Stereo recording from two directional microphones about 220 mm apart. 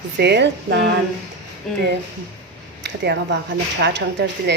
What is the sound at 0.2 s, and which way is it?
Speech, 50° right (ahead or behind).